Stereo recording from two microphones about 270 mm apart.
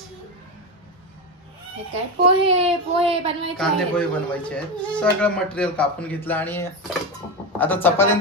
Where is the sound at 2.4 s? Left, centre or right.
Right.